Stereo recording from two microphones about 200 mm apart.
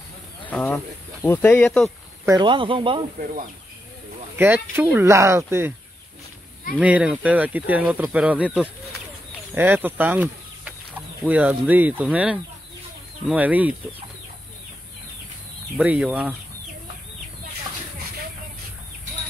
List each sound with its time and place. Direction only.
0.5 s cricket: 10° left (ahead or behind)
1.2 s speech: 10° left (ahead or behind)
2.2 s speech: 20° right (ahead or behind)
4.4 s speech: 10° right (ahead or behind)
6.8 s speech: 5° right (ahead or behind)
15.8 s speech: 5° right (ahead or behind)